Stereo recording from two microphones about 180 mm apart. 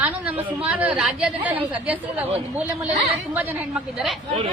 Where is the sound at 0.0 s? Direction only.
10° right (ahead or behind).